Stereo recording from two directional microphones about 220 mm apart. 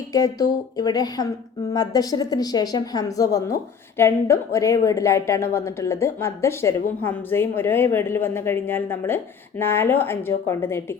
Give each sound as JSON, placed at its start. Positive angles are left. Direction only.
{"t": 0.1, "sound": "a woman's voice", "side_deg": 15}